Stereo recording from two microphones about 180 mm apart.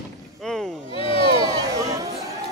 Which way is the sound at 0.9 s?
30° left (ahead or behind).